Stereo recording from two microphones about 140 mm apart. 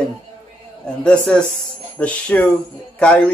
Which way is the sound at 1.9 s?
10° left (ahead or behind).